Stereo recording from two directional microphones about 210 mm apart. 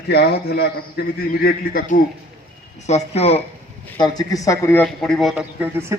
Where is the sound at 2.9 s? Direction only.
30° left (ahead or behind).